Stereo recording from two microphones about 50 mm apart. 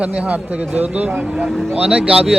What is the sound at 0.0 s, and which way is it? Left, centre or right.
Speech, right.